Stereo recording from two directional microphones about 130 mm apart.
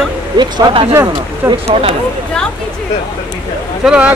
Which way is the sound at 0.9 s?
20° right (ahead or behind).